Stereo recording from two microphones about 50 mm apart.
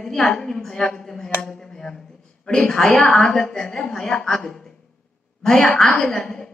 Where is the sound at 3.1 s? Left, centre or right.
Centre.